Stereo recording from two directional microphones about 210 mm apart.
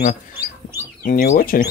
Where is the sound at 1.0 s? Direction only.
40° left (ahead or behind).